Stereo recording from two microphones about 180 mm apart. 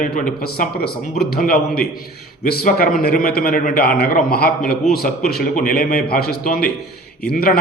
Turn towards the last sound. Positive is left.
turn(degrees=55)  # may be behind; listen again after turning